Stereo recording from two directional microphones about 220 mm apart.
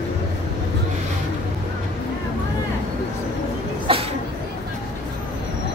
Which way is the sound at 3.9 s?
25° right (ahead or behind).